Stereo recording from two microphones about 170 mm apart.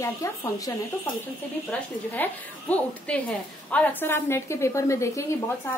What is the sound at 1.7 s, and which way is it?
A woman's voice, 10° left (ahead or behind).